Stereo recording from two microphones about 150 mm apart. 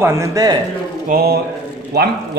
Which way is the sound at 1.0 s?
80° right.